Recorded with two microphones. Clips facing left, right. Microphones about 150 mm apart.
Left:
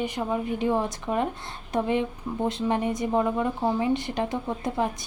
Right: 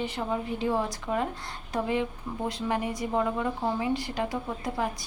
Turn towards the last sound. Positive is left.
turn(degrees=25)  # may be behind; listen again after turning